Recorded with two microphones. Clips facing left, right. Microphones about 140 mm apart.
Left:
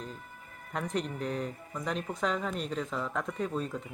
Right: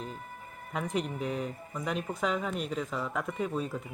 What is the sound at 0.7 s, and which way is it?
Speech, 5° right (ahead or behind).